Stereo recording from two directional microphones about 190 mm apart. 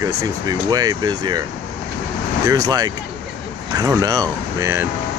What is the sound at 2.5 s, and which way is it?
Speech, 20° right (ahead or behind).